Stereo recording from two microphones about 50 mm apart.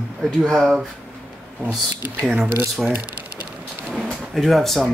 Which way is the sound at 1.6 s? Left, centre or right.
Right.